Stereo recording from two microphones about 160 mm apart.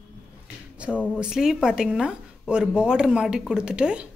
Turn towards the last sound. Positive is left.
turn(degrees=-5)  # may be behind; listen again after turning